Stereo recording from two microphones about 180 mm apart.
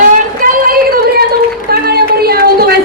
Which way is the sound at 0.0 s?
50° right (ahead or behind).